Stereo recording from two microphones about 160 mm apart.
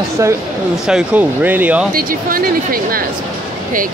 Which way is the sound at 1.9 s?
65° right (ahead or behind).